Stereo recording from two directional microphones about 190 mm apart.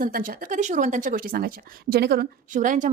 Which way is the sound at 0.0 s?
45° right (ahead or behind).